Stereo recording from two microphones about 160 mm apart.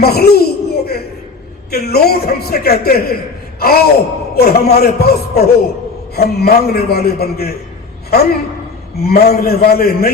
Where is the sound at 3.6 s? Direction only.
70° left (ahead or behind).